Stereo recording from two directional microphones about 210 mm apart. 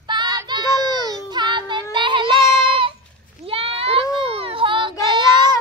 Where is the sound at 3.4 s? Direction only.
25° right (ahead or behind).